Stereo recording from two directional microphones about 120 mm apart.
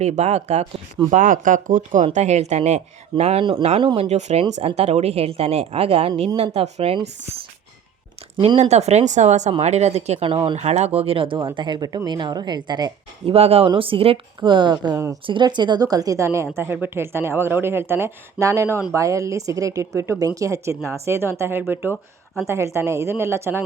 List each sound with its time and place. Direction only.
0.0 s a woman's voice: 65° right (ahead or behind)
1.1 s speech: 90° right
2.1 s a woman's voice: 70° right (ahead or behind); by 4.1 s 45° right (ahead or behind)
4.1 s a woman's voice: 70° right (ahead or behind)
9.5 s a woman's voice: 60° right (ahead or behind)
10.2 s a woman's voice: 45° right (ahead or behind)
10.6 s a woman's voice: 65° right (ahead or behind); by 12.9 s 35° right (ahead or behind)
13.2 s a woman's voice: 60° right (ahead or behind); by 23.6 s 20° right (ahead or behind)